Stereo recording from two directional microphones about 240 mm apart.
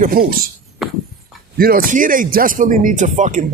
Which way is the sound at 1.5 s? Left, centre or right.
Right.